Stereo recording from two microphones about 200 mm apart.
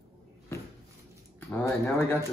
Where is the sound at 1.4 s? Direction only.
15° left (ahead or behind).